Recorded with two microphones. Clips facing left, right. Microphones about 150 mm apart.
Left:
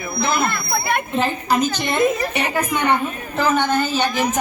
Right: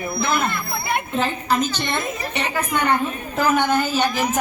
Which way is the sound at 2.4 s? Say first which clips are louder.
Right 1 dB; 15° left (ahead or behind).